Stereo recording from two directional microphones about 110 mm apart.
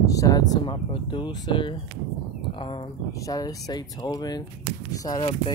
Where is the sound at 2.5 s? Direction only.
50° left (ahead or behind).